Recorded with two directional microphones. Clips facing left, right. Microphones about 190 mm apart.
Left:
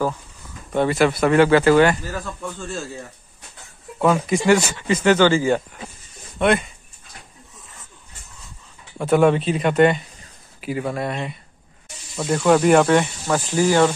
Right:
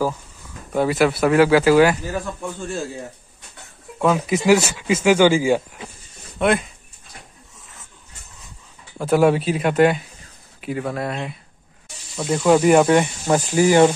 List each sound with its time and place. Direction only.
0.7 s speech: 5° right (ahead or behind)
2.1 s speech: 15° right (ahead or behind)
4.0 s speech: 5° right (ahead or behind)
8.9 s speech: centre (ahead or behind)
12.4 s speech: 5° right (ahead or behind)